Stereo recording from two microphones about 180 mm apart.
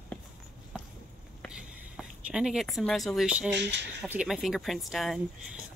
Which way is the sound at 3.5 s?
75° right (ahead or behind).